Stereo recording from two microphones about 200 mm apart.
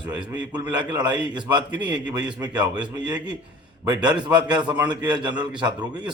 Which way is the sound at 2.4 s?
20° right (ahead or behind).